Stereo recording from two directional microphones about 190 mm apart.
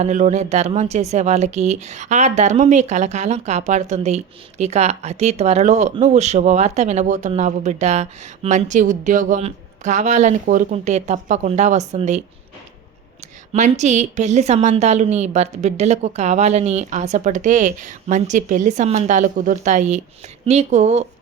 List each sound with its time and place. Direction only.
0.0 s speech: 40° right (ahead or behind)
13.5 s speech: 40° right (ahead or behind)